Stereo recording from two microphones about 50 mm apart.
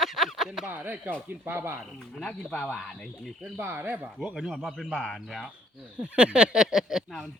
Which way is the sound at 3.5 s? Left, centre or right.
Right.